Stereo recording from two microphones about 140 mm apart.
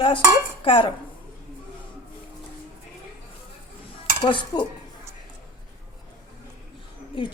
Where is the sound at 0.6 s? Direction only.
40° left (ahead or behind).